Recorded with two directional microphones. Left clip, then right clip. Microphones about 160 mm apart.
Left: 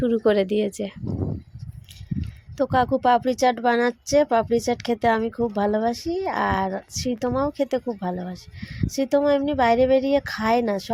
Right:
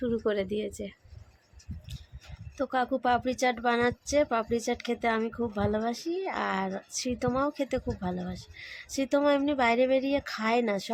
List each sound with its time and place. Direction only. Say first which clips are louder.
0.0 s speech: left 9 dB; 35° left (ahead or behind)
2.6 s speech: left 8 dB; 30° left (ahead or behind)